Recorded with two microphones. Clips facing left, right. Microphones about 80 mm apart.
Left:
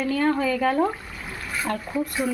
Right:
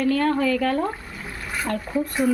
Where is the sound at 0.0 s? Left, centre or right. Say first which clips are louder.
Right 2 dB; centre.